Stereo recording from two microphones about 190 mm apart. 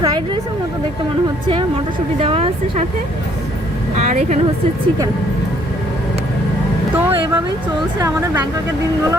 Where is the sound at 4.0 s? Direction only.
35° right (ahead or behind).